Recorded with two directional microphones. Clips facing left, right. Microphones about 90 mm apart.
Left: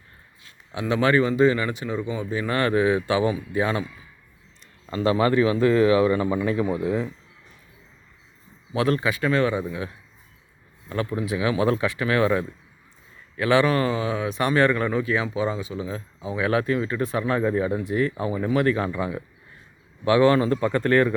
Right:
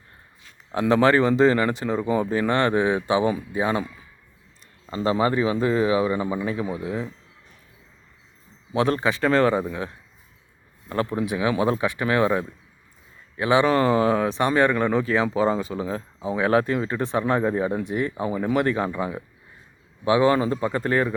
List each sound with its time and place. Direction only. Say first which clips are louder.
0.7 s speech: right 3 dB; 35° right (ahead or behind)
2.5 s speech: left 2 dB; 25° right (ahead or behind)
4.9 s speech: left 1 dB; 25° right (ahead or behind); by 7.1 s centre (ahead or behind)
8.7 s speech: right 1 dB; 30° right (ahead or behind)
10.8 s speech: right 2 dB; 35° right (ahead or behind); by 21.1 s 15° right (ahead or behind)